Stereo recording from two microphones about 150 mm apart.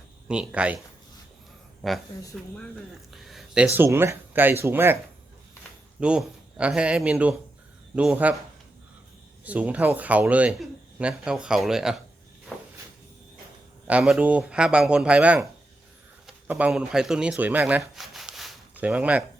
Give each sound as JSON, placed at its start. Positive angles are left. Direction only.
{"t": 0.3, "sound": "speech", "side_deg": -5}
{"t": 1.8, "sound": "speech", "side_deg": 0}
{"t": 3.1, "sound": "a sound", "side_deg": 0}
{"t": 3.8, "sound": "speech", "side_deg": -15}
{"t": 6.0, "sound": "speech", "side_deg": -5}
{"t": 9.4, "sound": "speech", "side_deg": -10}
{"t": 12.5, "sound": "walk", "side_deg": 0}
{"t": 13.8, "sound": "speech", "side_deg": -5}
{"t": 16.5, "sound": "speech", "side_deg": -10}
{"t": 17.9, "sound": "a sound", "side_deg": 0}